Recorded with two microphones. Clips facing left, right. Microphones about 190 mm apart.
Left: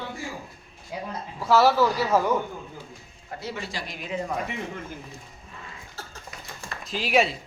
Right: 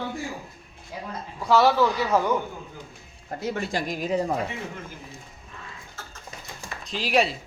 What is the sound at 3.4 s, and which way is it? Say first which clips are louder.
Speech: right 6 dB; 50° right (ahead or behind).